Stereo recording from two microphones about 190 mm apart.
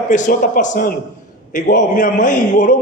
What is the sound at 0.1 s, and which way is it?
A man's voice, 45° left (ahead or behind).